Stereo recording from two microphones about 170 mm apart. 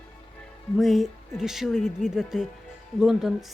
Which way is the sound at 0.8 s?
Centre (ahead or behind).